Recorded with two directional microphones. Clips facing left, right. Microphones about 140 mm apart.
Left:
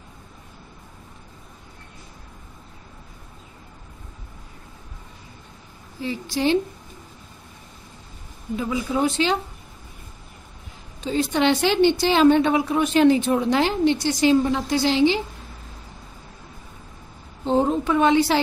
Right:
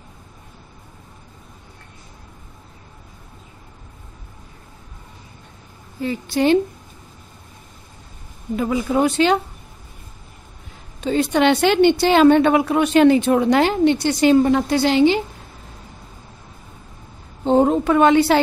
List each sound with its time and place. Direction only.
6.0 s a woman's voice: 55° right (ahead or behind)
8.5 s a woman's voice: 55° right (ahead or behind)
11.1 s a woman's voice: 65° right (ahead or behind)
17.5 s a woman's voice: 60° right (ahead or behind)